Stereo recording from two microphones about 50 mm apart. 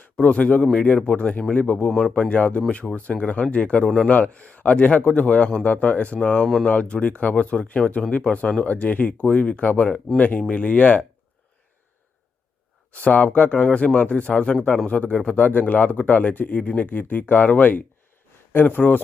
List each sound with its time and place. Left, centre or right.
0.2 s speech: left
12.9 s speech: left
15.4 s speech: left